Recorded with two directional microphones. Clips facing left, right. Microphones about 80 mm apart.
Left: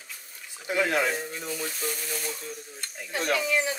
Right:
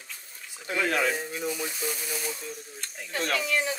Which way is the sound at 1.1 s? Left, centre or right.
Centre.